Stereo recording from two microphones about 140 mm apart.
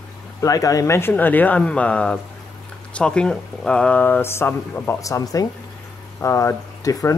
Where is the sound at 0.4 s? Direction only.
25° left (ahead or behind).